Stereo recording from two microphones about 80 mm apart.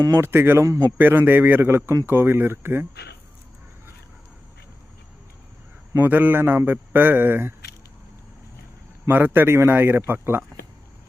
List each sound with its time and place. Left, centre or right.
0.2 s a man's voice: right
0.6 s a man's voice: right
0.9 s a man's voice: right
6.0 s a man's voice: right
9.0 s a man's voice: right